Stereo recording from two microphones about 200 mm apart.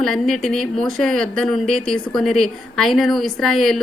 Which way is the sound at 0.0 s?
Centre (ahead or behind).